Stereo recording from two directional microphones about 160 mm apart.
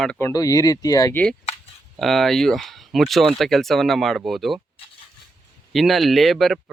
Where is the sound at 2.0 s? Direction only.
Centre (ahead or behind).